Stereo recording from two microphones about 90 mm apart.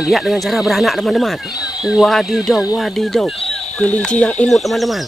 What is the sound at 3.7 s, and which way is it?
Speech, 15° left (ahead or behind).